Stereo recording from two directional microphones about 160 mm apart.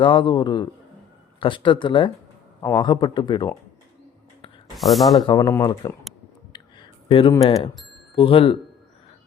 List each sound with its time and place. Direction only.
0.0 s speech: 30° left (ahead or behind)
4.8 s speech: centre (ahead or behind)
5.2 s speech: 25° left (ahead or behind)
6.5 s a sound: 30° left (ahead or behind)
8.1 s speech: 30° left (ahead or behind)